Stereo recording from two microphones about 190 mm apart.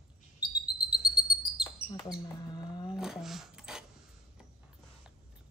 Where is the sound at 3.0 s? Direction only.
Centre (ahead or behind).